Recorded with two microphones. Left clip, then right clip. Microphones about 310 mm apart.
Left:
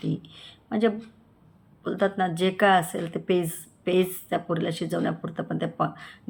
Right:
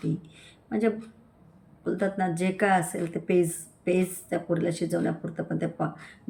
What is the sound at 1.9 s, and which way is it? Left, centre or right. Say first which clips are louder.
Speech: left 4 dB; centre.